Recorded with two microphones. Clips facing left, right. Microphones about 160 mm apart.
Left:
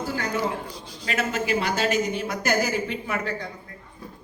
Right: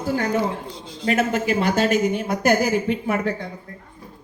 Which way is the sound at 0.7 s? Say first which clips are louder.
Right 3 dB; 25° right (ahead or behind).